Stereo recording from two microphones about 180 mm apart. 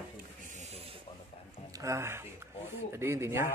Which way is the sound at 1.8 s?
15° right (ahead or behind).